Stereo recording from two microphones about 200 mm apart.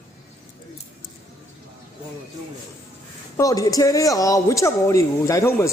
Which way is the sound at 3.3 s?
15° left (ahead or behind).